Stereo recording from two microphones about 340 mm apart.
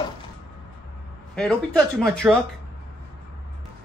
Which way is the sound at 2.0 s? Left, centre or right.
Centre.